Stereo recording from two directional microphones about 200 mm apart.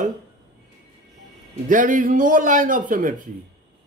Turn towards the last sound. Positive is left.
turn(degrees=-40)  # may be behind; listen again after turning